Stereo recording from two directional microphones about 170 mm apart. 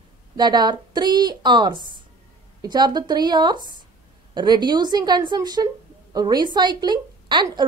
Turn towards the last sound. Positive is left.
turn(degrees=-25)  # may be behind; listen again after turning